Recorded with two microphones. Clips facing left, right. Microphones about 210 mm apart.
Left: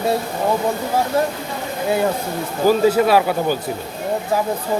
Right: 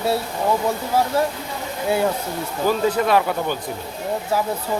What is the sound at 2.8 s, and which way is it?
Speech, 10° left (ahead or behind).